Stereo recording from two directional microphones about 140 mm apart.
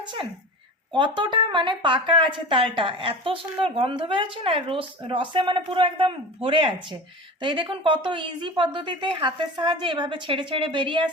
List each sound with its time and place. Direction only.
0.9 s speech: 35° right (ahead or behind)